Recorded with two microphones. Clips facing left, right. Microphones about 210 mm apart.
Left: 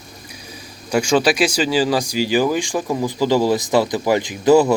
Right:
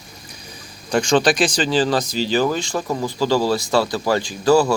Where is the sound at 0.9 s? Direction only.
10° left (ahead or behind).